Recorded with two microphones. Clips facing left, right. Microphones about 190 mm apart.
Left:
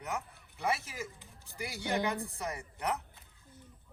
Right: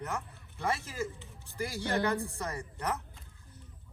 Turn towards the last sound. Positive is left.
turn(degrees=15)  # may be behind; listen again after turning